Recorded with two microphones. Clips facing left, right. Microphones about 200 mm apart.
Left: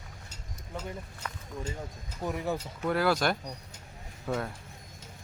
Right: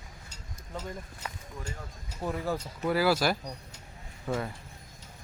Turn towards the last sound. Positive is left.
turn(degrees=-5)  # may be behind; listen again after turning